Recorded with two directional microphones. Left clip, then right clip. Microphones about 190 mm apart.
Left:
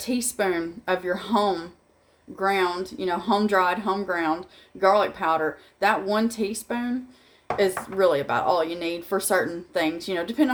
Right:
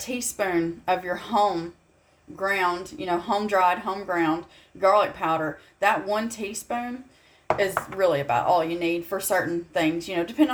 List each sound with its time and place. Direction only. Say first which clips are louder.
0.0 s speech: left 2 dB; 20° left (ahead or behind)